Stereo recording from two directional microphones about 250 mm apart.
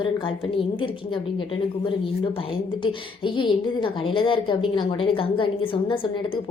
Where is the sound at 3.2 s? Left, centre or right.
Centre.